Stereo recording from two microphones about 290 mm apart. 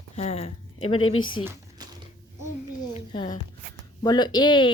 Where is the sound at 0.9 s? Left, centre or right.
Left.